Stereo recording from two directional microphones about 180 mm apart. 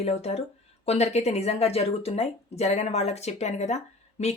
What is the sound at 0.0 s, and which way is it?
Speech, 35° left (ahead or behind).